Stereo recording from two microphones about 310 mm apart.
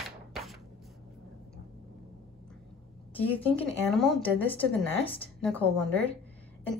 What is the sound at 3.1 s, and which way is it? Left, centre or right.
Speech, centre.